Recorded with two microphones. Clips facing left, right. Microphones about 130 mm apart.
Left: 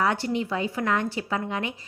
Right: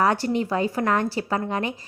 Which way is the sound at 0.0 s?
40° right (ahead or behind).